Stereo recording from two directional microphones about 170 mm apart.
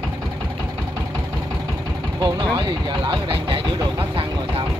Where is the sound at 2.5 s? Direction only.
25° right (ahead or behind).